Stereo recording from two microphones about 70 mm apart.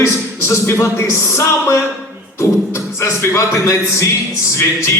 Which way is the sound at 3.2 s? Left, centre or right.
Left.